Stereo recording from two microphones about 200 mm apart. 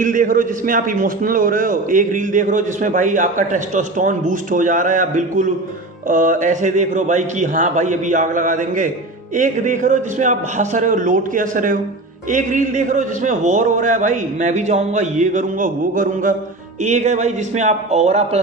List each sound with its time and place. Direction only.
0.0 s a man's voice: 40° right (ahead or behind)